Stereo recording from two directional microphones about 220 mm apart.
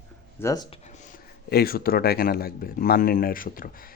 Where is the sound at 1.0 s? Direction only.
45° left (ahead or behind).